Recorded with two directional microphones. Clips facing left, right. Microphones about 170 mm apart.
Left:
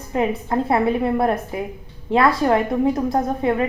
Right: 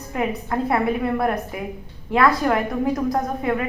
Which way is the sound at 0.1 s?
25° left (ahead or behind).